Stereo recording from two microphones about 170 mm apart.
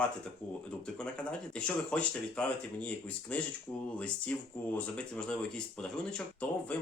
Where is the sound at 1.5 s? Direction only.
5° left (ahead or behind).